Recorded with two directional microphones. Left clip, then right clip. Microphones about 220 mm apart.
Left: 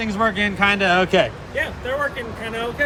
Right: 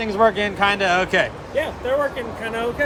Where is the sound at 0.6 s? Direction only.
15° right (ahead or behind).